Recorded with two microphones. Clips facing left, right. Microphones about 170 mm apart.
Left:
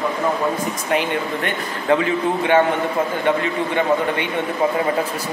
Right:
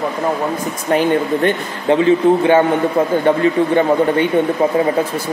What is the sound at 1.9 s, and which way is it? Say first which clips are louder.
A man's voice: right 7 dB; 30° right (ahead or behind).